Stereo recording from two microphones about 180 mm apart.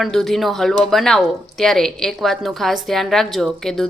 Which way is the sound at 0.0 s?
Centre (ahead or behind).